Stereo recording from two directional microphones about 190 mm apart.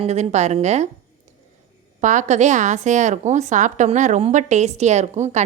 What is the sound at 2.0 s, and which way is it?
A woman's voice, 40° right (ahead or behind).